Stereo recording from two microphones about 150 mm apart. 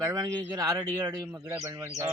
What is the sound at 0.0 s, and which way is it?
A man's voice, 20° right (ahead or behind).